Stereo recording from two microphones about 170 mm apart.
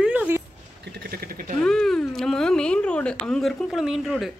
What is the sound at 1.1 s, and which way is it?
Speech, 60° right (ahead or behind).